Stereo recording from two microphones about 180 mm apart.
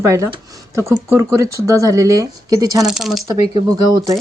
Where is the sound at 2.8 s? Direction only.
Centre (ahead or behind).